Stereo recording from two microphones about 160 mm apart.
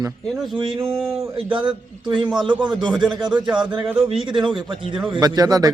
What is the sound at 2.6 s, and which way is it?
Speech, 30° right (ahead or behind).